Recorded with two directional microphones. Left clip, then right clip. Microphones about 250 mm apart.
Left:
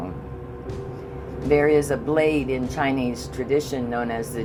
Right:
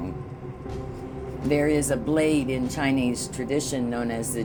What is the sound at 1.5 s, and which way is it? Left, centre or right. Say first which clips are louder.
Speech: left 5 dB; right.